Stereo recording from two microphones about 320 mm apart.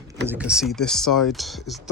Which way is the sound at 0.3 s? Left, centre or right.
Centre.